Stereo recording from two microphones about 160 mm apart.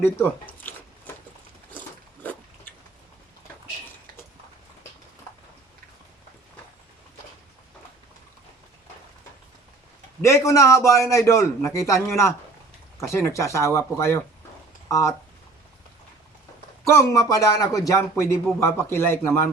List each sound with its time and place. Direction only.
0.0 s speech: 10° left (ahead or behind)
2.7 s a sound: 10° left (ahead or behind)
10.2 s a man's voice: 20° left (ahead or behind)
16.8 s speech: 20° left (ahead or behind)